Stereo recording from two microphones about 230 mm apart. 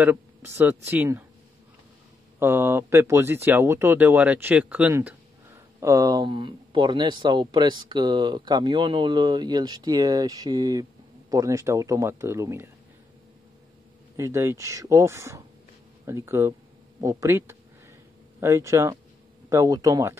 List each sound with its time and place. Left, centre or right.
0.0 s speech: centre
2.3 s speech: centre
14.1 s speech: centre